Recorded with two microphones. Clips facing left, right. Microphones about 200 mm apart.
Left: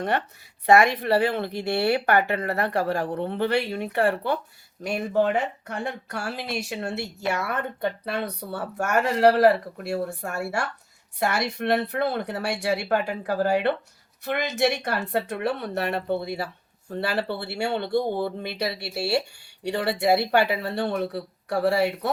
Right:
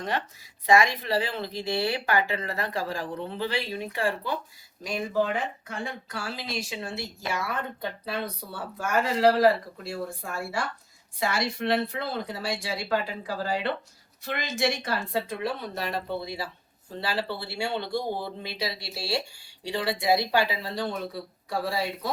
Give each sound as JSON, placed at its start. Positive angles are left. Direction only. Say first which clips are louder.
{"t": 0.6, "sound": "speech", "louder": "left 4 dB", "side_deg": 60}
{"t": 4.9, "sound": "speech", "louder": "left 4 dB", "side_deg": 50}
{"t": 5.3, "sound": "speech", "louder": "left 5 dB", "side_deg": 65}